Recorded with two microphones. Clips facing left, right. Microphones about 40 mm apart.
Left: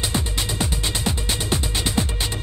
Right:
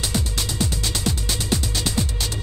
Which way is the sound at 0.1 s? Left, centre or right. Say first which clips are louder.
Left 1 dB; left.